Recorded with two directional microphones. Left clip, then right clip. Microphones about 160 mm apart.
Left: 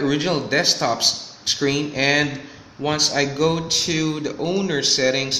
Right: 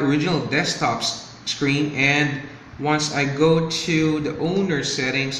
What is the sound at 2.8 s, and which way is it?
A man's voice, 80° left.